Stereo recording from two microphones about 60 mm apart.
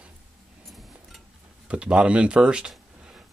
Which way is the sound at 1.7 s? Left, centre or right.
Centre.